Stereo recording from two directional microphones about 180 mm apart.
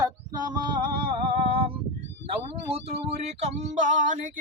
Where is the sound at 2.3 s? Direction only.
35° right (ahead or behind).